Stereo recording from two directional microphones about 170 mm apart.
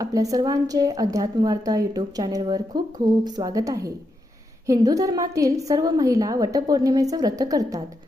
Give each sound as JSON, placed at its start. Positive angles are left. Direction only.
{"t": 0.0, "sound": "a woman's voice", "side_deg": -20}